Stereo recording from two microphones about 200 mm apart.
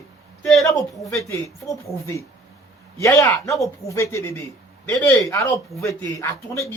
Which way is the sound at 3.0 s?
15° left (ahead or behind).